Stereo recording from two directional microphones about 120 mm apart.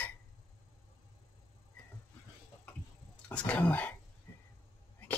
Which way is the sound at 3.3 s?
15° left (ahead or behind).